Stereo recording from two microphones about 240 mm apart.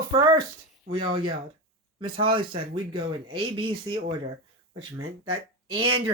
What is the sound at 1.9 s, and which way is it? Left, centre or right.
Speech, right.